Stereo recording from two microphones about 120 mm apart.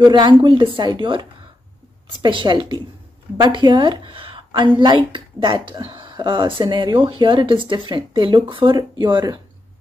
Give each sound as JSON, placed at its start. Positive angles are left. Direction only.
{"t": 0.0, "sound": "speech", "side_deg": -40}
{"t": 2.2, "sound": "a woman's voice", "side_deg": -40}